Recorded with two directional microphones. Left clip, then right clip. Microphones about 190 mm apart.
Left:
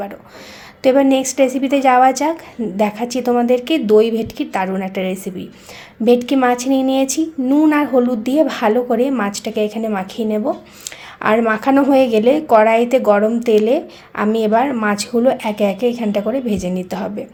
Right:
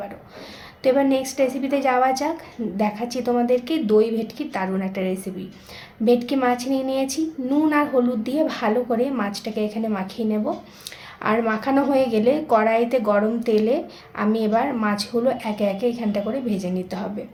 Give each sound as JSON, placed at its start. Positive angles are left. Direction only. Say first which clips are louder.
{"t": 0.8, "sound": "a woman's voice", "louder": "left 6 dB", "side_deg": 40}